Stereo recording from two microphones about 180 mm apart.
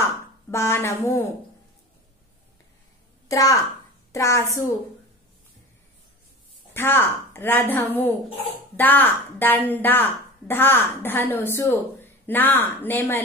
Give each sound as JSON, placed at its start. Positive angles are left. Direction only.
{"t": 0.0, "sound": "speech", "side_deg": 15}
{"t": 3.3, "sound": "a woman's voice", "side_deg": 20}
{"t": 6.7, "sound": "a woman's voice", "side_deg": 10}